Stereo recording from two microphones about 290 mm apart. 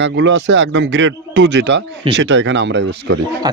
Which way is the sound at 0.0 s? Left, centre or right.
Right.